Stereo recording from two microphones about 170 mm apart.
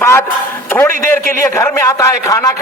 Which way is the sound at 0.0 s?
15° left (ahead or behind).